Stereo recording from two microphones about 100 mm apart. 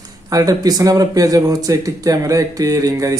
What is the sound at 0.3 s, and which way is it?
A man's voice, 35° right (ahead or behind).